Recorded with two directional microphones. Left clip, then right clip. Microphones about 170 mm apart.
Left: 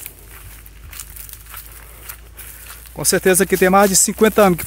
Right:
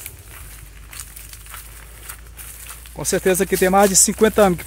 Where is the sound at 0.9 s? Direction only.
5° left (ahead or behind).